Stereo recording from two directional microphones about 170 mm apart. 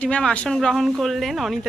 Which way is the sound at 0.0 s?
5° left (ahead or behind).